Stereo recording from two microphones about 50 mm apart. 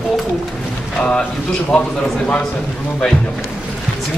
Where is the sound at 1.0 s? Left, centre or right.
Centre.